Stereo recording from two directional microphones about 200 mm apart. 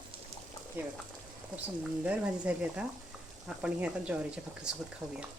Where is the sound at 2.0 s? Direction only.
5° right (ahead or behind).